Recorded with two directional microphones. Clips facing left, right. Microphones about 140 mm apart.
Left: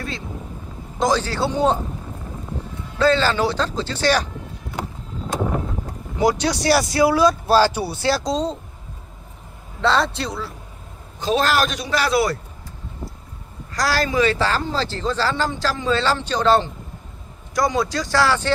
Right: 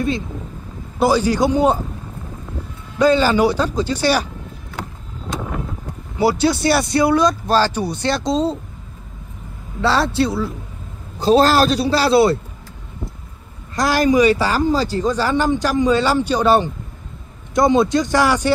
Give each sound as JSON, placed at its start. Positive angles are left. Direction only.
{"t": 0.9, "sound": "speech", "side_deg": -10}
{"t": 3.0, "sound": "speech", "side_deg": -15}
{"t": 6.1, "sound": "speech", "side_deg": -5}
{"t": 9.8, "sound": "speech", "side_deg": 0}
{"t": 11.1, "sound": "a man's voice", "side_deg": -35}
{"t": 13.7, "sound": "speech", "side_deg": -20}